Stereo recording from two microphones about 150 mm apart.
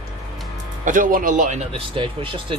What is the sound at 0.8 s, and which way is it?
Speech, 65° right (ahead or behind).